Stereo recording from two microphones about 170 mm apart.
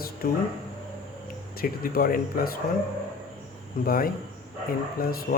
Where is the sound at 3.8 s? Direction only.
60° left (ahead or behind).